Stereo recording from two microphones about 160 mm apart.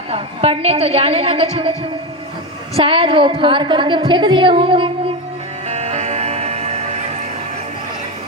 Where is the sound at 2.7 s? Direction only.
35° right (ahead or behind).